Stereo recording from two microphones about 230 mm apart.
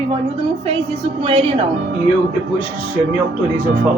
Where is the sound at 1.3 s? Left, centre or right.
Right.